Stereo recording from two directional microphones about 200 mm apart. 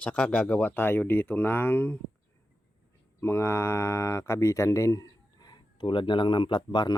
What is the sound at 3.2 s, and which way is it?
Speech, 15° left (ahead or behind).